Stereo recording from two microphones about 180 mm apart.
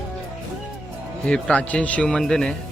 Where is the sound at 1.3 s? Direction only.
5° left (ahead or behind).